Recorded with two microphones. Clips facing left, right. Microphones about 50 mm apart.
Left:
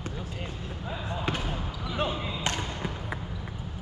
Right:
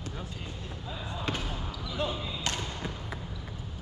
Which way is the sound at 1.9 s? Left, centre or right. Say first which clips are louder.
Left 3 dB; left.